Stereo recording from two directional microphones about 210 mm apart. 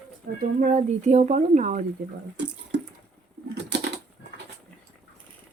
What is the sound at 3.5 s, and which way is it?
Typewriter, 55° right (ahead or behind).